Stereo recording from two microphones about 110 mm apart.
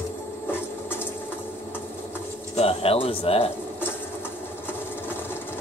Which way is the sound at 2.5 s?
65° left (ahead or behind).